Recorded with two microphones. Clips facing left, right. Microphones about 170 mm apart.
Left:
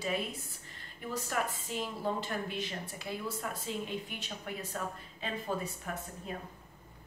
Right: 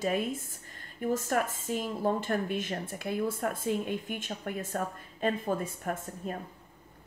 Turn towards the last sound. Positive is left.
turn(degrees=-50)  # may be behind; listen again after turning